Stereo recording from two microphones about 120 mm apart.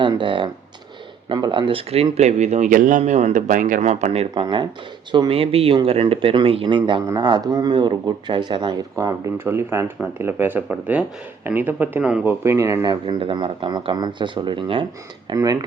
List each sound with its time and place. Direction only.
0.0 s speech: 40° right (ahead or behind)
2.1 s speech: 65° right (ahead or behind)
4.4 s speech: 40° right (ahead or behind)
5.3 s speech: 55° right (ahead or behind)
9.0 s speech: 25° right (ahead or behind)
12.9 s speech: 40° right (ahead or behind)
15.3 s speech: 30° right (ahead or behind)